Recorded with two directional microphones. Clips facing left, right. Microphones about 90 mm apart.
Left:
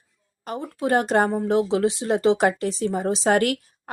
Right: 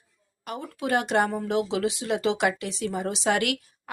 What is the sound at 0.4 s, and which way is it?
Speech, 35° left (ahead or behind).